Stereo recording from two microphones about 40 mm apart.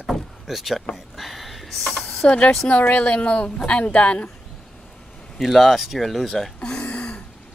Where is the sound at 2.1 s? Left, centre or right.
Left.